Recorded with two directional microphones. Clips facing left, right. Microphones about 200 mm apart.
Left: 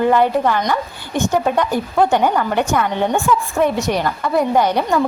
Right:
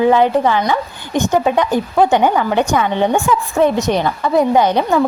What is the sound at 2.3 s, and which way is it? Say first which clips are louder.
A woman's voice: right 2 dB; 10° right (ahead or behind).